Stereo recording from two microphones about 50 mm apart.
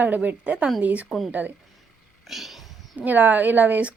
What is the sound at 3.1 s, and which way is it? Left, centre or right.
Speech, right.